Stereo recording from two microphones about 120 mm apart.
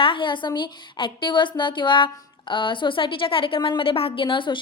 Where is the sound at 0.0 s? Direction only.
45° left (ahead or behind).